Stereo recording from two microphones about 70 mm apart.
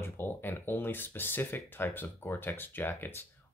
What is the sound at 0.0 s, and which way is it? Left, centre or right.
Speech, left.